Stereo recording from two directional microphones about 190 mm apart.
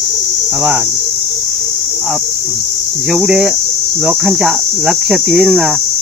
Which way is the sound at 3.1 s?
5° right (ahead or behind).